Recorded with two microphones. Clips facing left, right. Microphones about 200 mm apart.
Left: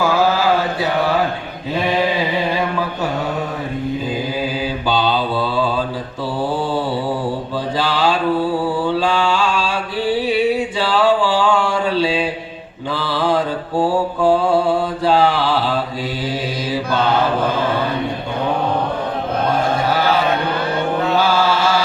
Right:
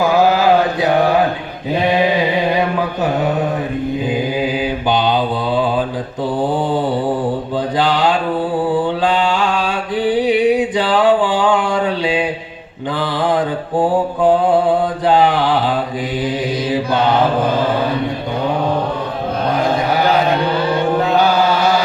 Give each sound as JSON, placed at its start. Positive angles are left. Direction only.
{"t": 0.0, "sound": "chant", "side_deg": -20}
{"t": 4.1, "sound": "mantra", "side_deg": -20}
{"t": 21.1, "sound": "mantra", "side_deg": -20}